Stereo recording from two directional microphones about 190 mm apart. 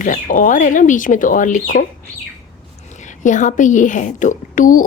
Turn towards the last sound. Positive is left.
turn(degrees=45)  # may be behind; listen again after turning